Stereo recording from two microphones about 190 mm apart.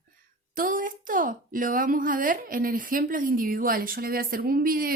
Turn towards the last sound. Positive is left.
turn(degrees=-50)  # may be behind; listen again after turning